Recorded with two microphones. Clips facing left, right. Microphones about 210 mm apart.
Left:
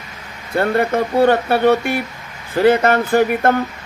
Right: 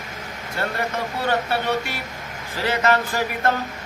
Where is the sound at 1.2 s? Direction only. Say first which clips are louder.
Left 9 dB; 55° left (ahead or behind).